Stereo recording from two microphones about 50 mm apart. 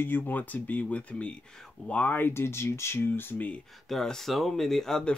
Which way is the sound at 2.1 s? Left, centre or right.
Left.